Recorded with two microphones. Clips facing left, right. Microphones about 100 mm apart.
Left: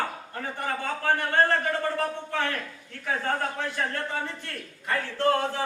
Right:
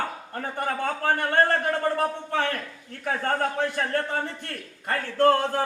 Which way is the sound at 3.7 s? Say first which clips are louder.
Right 3 dB; 55° right (ahead or behind).